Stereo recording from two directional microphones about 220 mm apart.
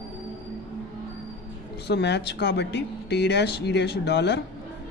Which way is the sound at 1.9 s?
50° left (ahead or behind).